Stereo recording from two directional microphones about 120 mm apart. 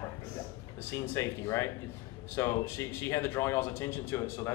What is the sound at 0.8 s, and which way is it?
Speech, 20° left (ahead or behind).